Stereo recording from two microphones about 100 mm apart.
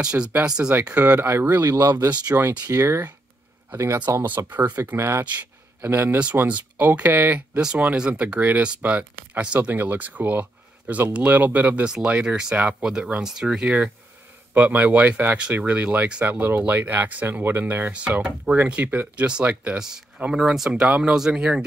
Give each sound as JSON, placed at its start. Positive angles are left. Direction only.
{"t": 0.0, "sound": "speech", "side_deg": -10}
{"t": 1.6, "sound": "speech", "side_deg": -35}
{"t": 2.0, "sound": "speech", "side_deg": -15}
{"t": 2.6, "sound": "speech", "side_deg": -30}